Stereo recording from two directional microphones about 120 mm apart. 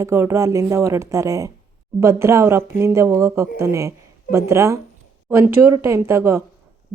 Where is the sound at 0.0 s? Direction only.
25° right (ahead or behind).